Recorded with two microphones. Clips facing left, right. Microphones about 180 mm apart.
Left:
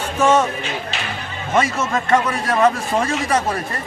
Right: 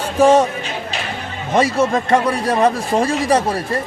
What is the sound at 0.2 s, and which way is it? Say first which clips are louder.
Speech: right 4 dB; 35° right (ahead or behind).